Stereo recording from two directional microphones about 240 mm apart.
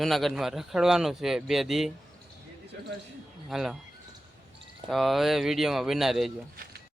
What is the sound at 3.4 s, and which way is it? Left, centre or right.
Speech, centre.